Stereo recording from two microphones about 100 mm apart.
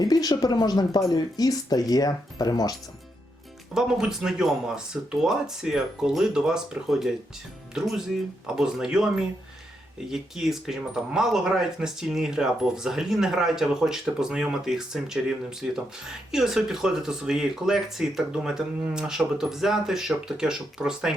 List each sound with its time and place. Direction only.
0.0 s speech: 40° left (ahead or behind)
3.8 s speech: 5° right (ahead or behind)